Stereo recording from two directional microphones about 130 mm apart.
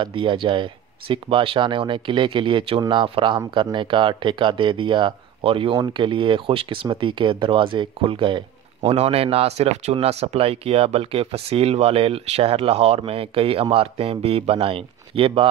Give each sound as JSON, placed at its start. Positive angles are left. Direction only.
{"t": 0.0, "sound": "speech", "side_deg": -40}